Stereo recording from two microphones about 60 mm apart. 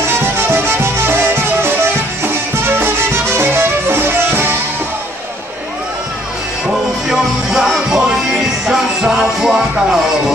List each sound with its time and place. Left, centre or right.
0.2 s music: right
7.1 s music: centre